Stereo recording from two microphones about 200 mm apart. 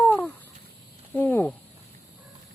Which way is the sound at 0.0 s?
10° left (ahead or behind).